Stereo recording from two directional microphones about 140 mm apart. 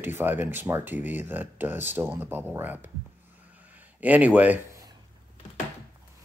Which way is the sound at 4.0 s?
10° right (ahead or behind).